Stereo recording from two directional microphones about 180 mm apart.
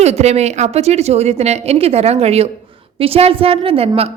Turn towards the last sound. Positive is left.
turn(degrees=-35)  # may be behind; listen again after turning